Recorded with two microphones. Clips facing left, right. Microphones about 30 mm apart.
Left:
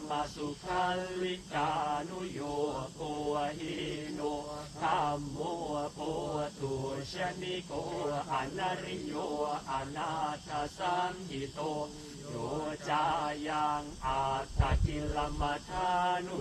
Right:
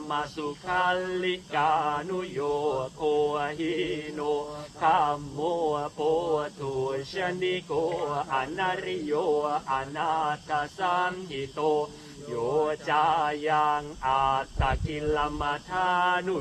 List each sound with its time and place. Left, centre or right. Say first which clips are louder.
0.1 s mantra: right 5 dB; right
5.4 s mantra: right 8 dB; right
6.6 s mantra: right 7 dB; right
9.3 s speech: right 6 dB; right
9.7 s mantra: right 8 dB; right